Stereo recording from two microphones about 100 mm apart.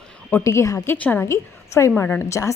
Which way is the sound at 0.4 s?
30° left (ahead or behind).